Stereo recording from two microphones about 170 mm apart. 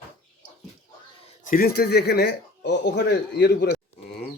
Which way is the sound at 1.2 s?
50° left (ahead or behind).